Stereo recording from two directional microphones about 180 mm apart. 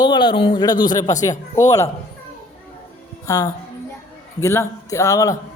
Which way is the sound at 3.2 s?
20° left (ahead or behind).